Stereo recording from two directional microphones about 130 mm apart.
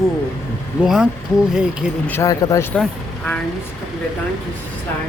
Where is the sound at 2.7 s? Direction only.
5° left (ahead or behind).